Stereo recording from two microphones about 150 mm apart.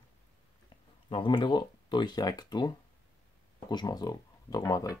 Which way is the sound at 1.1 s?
30° left (ahead or behind).